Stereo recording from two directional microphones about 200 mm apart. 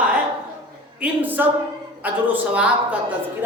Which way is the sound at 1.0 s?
10° right (ahead or behind).